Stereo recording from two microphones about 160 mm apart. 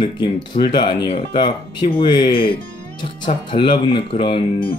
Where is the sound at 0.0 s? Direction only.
30° left (ahead or behind).